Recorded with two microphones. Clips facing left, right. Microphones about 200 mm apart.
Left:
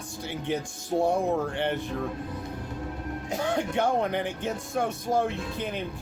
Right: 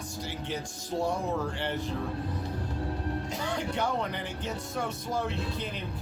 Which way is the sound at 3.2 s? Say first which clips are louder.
Left 5 dB; 50° left (ahead or behind).